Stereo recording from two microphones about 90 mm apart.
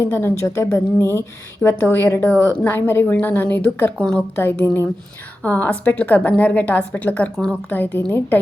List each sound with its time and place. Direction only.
0.0 s a woman's voice: 25° left (ahead or behind)
3.9 s a woman's voice: 10° left (ahead or behind)
4.4 s a woman's voice: 20° left (ahead or behind)